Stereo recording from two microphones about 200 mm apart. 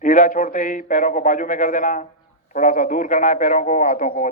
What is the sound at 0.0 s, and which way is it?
A man's voice, 40° left (ahead or behind).